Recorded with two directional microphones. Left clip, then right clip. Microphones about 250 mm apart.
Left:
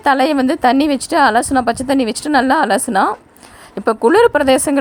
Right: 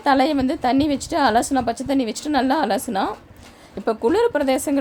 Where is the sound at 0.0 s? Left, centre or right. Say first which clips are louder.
Left 5 dB; left.